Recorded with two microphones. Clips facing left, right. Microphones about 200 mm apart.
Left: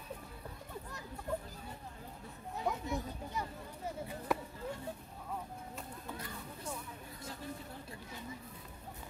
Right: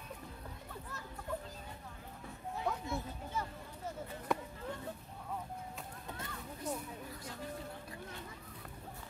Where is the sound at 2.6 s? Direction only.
15° left (ahead or behind).